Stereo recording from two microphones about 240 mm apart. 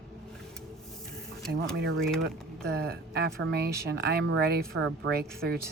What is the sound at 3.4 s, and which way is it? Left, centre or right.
Speech, right.